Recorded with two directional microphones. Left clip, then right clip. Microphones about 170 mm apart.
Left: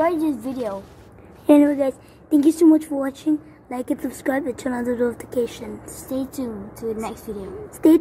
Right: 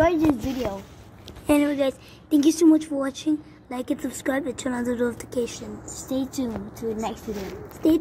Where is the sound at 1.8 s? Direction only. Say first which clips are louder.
Left 2 dB; 15° left (ahead or behind).